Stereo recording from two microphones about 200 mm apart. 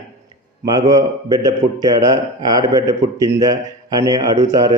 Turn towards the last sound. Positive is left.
turn(degrees=-20)  # may be behind; listen again after turning